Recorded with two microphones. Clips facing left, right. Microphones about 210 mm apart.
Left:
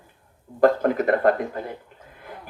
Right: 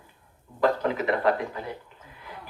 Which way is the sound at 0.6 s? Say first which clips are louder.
Left 6 dB; 50° left (ahead or behind).